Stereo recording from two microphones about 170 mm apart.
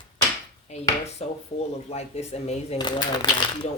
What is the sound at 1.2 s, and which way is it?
Speech, 40° left (ahead or behind).